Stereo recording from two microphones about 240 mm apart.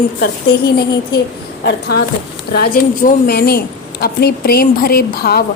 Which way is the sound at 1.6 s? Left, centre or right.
Left.